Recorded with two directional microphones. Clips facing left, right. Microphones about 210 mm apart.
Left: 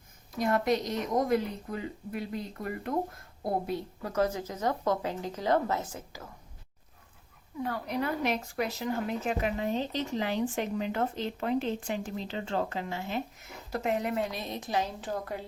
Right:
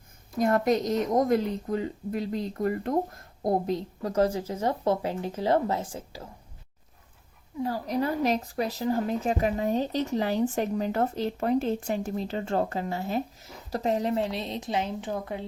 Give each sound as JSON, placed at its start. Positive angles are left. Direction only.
{"t": 0.4, "sound": "speech", "side_deg": -45}
{"t": 7.6, "sound": "speech", "side_deg": -30}